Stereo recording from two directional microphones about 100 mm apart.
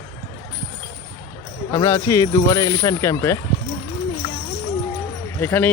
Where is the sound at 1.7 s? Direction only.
30° left (ahead or behind).